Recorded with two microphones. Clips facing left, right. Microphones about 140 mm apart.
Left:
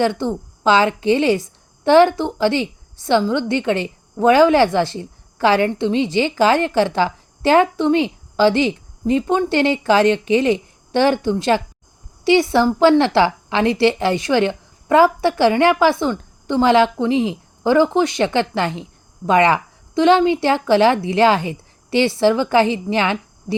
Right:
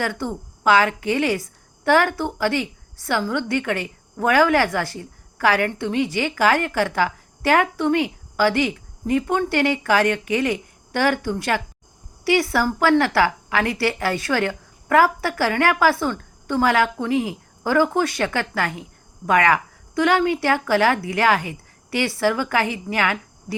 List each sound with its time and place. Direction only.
0.0 s a woman's voice: 25° left (ahead or behind)